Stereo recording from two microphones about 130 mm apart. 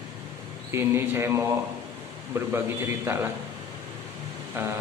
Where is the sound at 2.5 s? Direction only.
20° right (ahead or behind).